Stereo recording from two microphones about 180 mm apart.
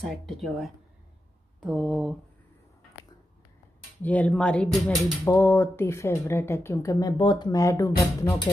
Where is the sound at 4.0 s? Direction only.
10° left (ahead or behind).